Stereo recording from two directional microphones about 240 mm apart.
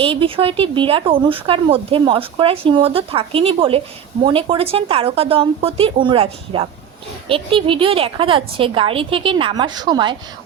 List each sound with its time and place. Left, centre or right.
0.0 s speech: right